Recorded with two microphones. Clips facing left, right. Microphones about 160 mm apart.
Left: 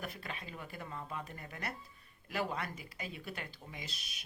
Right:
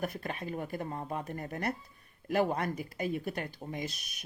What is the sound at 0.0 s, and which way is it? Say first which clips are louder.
Speech: right 8 dB; 50° right (ahead or behind).